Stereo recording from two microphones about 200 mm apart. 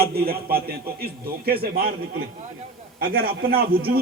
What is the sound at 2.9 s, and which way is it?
Speech, 50° right (ahead or behind).